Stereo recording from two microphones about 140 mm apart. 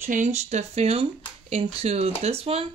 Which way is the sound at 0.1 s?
55° right (ahead or behind).